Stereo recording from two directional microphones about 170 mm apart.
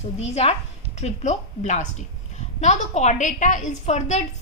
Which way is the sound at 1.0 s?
40° left (ahead or behind).